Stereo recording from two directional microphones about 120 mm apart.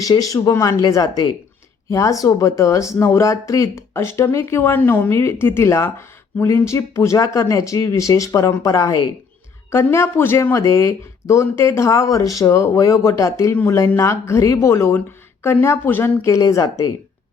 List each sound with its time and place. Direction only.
0.0 s speech: 30° left (ahead or behind)
9.7 s speech: 20° left (ahead or behind)